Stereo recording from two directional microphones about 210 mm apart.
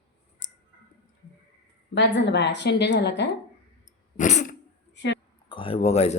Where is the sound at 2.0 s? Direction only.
55° left (ahead or behind).